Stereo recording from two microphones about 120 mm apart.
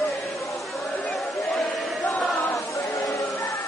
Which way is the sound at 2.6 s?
25° left (ahead or behind).